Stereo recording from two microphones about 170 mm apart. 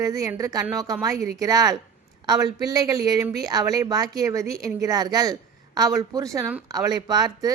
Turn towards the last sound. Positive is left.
turn(degrees=-25)  # may be behind; listen again after turning